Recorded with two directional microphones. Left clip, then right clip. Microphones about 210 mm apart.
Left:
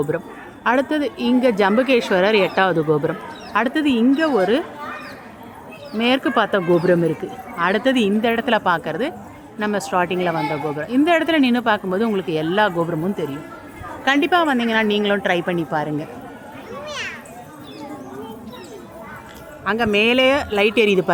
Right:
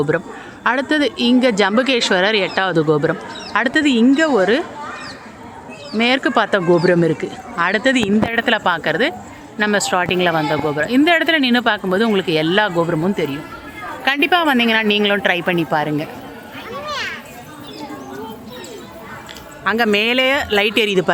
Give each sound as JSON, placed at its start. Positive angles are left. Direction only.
{"t": 0.1, "sound": "speech", "side_deg": 0}
{"t": 5.9, "sound": "speech", "side_deg": 0}
{"t": 16.8, "sound": "a sound", "side_deg": 10}
{"t": 19.6, "sound": "speech", "side_deg": 0}